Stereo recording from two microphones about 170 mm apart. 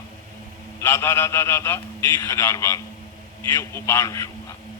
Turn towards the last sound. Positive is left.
turn(degrees=15)  # may be behind; listen again after turning